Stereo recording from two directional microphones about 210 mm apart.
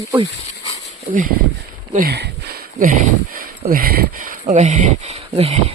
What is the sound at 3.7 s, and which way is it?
Speech, 45° right (ahead or behind).